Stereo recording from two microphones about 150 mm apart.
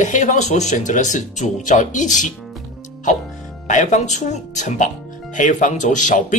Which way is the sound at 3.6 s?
55° left (ahead or behind).